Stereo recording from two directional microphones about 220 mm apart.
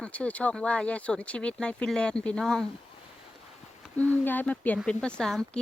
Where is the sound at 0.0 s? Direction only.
5° left (ahead or behind).